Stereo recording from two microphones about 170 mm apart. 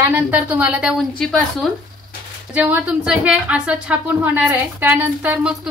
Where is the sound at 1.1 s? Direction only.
5° left (ahead or behind).